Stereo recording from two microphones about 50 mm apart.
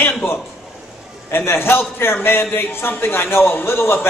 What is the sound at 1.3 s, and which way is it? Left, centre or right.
A man's voice, left.